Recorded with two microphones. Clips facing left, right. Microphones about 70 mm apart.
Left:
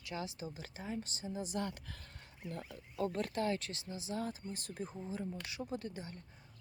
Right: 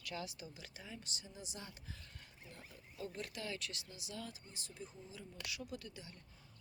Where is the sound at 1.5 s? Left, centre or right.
Left.